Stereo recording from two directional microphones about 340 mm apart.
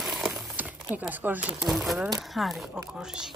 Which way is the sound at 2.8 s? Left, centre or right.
Centre.